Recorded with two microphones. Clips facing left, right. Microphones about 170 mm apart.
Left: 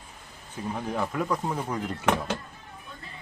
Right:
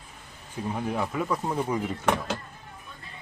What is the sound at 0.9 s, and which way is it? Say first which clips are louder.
Speech: left 1 dB; 5° right (ahead or behind).